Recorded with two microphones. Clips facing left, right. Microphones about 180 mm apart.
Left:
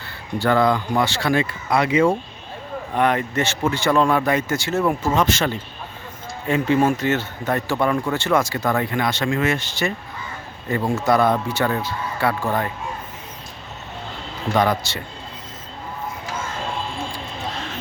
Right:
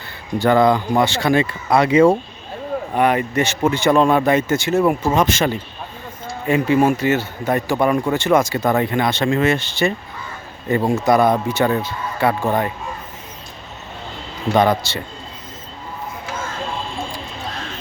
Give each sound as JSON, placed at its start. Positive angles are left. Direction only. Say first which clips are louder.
{"t": 0.3, "sound": "speech", "louder": "right 4 dB", "side_deg": -20}
{"t": 1.7, "sound": "speech", "louder": "right 5 dB", "side_deg": -35}
{"t": 2.9, "sound": "speech", "louder": "right 2 dB", "side_deg": -10}
{"t": 14.5, "sound": "speech", "louder": "right 4 dB", "side_deg": -25}